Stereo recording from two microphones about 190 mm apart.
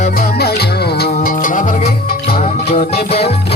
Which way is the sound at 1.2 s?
45° left (ahead or behind).